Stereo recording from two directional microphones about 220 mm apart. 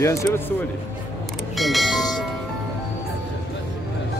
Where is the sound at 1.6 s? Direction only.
Centre (ahead or behind).